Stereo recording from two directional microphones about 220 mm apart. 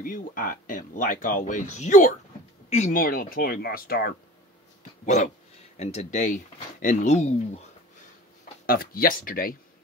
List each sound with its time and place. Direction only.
0.0 s speech: 40° left (ahead or behind)
5.0 s speech: 30° left (ahead or behind)
8.6 s speech: 40° left (ahead or behind)